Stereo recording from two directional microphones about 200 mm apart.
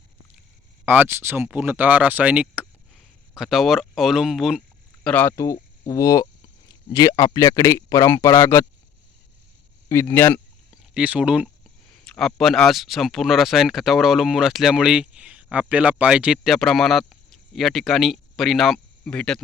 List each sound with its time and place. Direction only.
0.9 s speech: 10° right (ahead or behind)
5.0 s speech: 10° left (ahead or behind)
9.9 s speech: 10° left (ahead or behind)
10.9 s speech: 5° right (ahead or behind)